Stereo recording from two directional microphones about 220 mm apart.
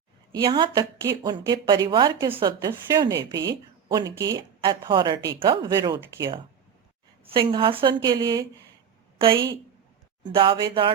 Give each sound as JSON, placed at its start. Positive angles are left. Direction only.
{"t": 0.3, "sound": "a woman's voice", "side_deg": -20}
{"t": 10.2, "sound": "a woman's voice", "side_deg": -20}